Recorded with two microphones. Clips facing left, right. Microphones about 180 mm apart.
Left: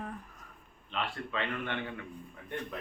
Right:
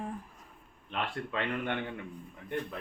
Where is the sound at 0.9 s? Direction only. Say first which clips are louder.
Right 1 dB; 55° right (ahead or behind).